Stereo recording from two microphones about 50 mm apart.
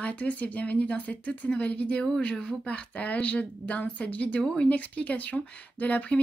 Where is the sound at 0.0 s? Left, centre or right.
Left.